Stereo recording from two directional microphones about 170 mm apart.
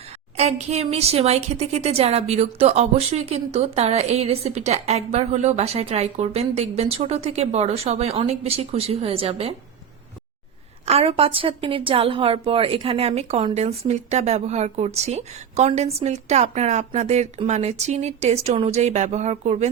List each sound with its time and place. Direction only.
0.3 s speech: 40° right (ahead or behind)
10.8 s speech: 35° right (ahead or behind)